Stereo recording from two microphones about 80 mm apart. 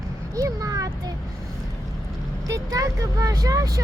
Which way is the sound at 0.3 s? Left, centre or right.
Right.